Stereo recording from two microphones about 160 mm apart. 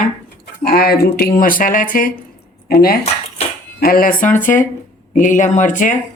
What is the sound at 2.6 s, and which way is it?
Speech, 70° left (ahead or behind).